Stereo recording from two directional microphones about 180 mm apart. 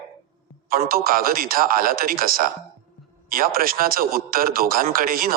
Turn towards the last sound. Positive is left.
turn(degrees=-55)  # may be behind; listen again after turning